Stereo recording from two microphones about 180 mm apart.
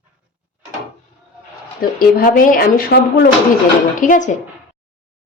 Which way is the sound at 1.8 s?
55° left (ahead or behind).